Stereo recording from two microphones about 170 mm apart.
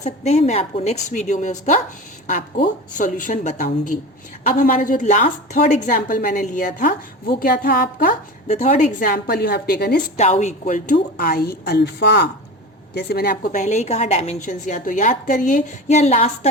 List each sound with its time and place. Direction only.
0.0 s a woman's voice: 40° left (ahead or behind); by 8.1 s 60° left (ahead or behind)
8.4 s a woman's voice: 45° left (ahead or behind); by 10.0 s 60° left (ahead or behind)
10.2 s a woman's voice: 45° left (ahead or behind)